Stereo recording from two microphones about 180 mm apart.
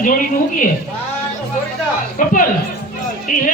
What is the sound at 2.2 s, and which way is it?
Speech, 50° left (ahead or behind).